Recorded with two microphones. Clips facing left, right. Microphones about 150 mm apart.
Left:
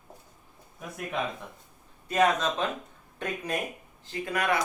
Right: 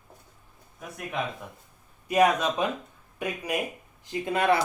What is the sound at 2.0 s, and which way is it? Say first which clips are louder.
Speech: right 2 dB; 10° right (ahead or behind).